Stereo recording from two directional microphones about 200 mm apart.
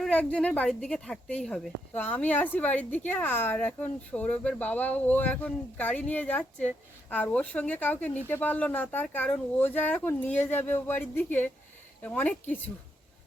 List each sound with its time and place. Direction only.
0.0 s speech: 5° left (ahead or behind)